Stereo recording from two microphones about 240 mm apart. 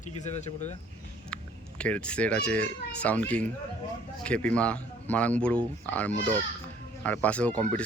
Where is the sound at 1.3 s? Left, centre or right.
Centre.